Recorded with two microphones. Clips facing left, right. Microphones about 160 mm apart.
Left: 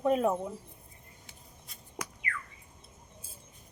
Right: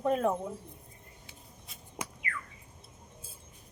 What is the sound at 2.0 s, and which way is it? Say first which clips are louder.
Squawk: even; 25° right (ahead or behind).